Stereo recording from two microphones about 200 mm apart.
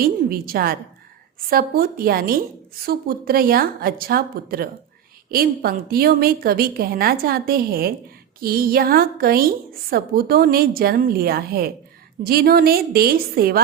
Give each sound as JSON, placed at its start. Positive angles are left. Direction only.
{"t": 0.0, "sound": "a woman's voice", "side_deg": -45}